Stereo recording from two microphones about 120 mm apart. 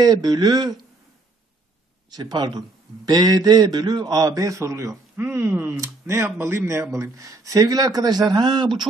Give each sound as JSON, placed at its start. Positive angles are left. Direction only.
{"t": 0.0, "sound": "speech", "side_deg": -30}
{"t": 2.0, "sound": "a man's voice", "side_deg": -35}